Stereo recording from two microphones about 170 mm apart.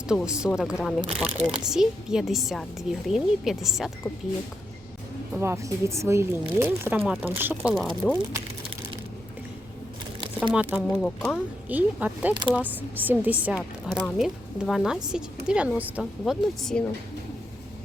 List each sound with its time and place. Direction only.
0.1 s speech: 5° right (ahead or behind)
5.3 s a woman's voice: 15° right (ahead or behind)
7.0 s speech: centre (ahead or behind)
7.3 s speech: 10° right (ahead or behind)
10.5 s a woman's voice: 10° right (ahead or behind)
10.9 s speech: 5° left (ahead or behind)
11.7 s a woman's voice: 10° right (ahead or behind)